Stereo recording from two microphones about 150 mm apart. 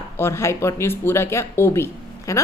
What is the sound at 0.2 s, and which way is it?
Speech, 15° left (ahead or behind).